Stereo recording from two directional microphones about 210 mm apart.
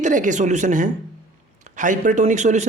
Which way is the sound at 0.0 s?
35° right (ahead or behind).